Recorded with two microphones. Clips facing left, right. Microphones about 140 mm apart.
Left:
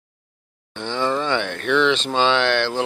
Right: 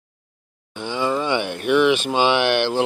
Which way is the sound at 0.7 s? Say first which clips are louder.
Even; 10° right (ahead or behind).